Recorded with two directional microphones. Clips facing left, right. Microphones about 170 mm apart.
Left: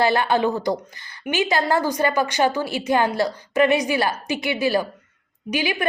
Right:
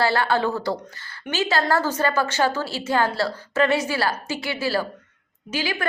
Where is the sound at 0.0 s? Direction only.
20° left (ahead or behind).